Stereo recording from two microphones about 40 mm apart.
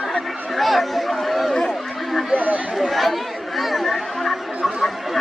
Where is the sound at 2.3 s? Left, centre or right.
Right.